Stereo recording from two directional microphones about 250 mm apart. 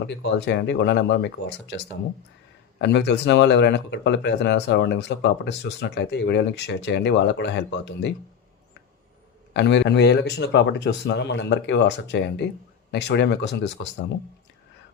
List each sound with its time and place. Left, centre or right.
0.1 s speech: left
9.5 s speech: left